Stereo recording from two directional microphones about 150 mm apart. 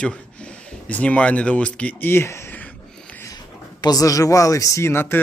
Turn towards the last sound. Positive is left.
turn(degrees=15)  # may be behind; listen again after turning